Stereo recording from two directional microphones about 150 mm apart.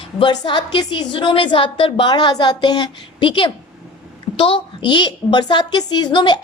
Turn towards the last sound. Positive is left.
turn(degrees=30)  # may be behind; listen again after turning